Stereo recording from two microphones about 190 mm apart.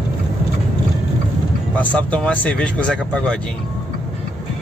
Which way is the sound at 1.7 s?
5° left (ahead or behind).